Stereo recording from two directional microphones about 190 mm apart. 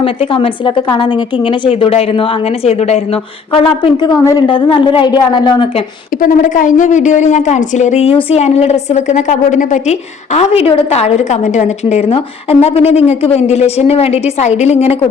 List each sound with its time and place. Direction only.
0.0 s a woman's voice: 30° left (ahead or behind)
6.2 s a woman's voice: 45° left (ahead or behind)